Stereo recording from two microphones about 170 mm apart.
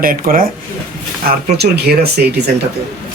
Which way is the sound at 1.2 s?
70° right (ahead or behind).